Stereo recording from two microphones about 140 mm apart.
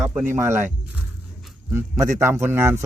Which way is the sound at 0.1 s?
10° right (ahead or behind).